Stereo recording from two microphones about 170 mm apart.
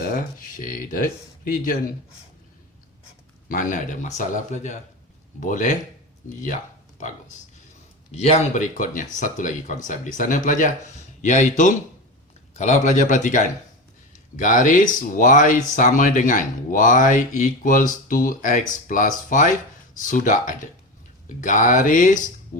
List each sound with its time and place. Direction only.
0.1 s speech: 50° left (ahead or behind)
3.5 s speech: 50° left (ahead or behind)
8.1 s speech: 40° left (ahead or behind)